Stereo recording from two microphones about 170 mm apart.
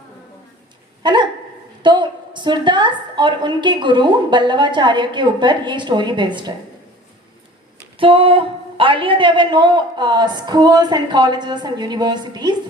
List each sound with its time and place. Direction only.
1.0 s a woman's voice: 25° right (ahead or behind)
7.9 s a woman's voice: 30° right (ahead or behind)